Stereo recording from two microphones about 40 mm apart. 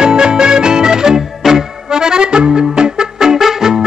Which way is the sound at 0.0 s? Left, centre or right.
Right.